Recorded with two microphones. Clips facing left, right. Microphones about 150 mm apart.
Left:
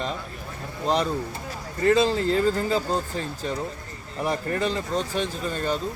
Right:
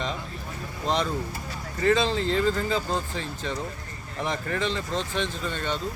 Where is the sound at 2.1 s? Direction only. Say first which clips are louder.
Left 2 dB; 40° left (ahead or behind).